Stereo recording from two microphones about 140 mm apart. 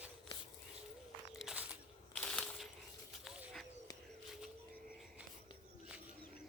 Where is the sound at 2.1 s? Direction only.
5° left (ahead or behind).